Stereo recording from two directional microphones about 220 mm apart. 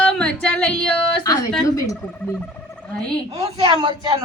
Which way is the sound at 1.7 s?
15° left (ahead or behind).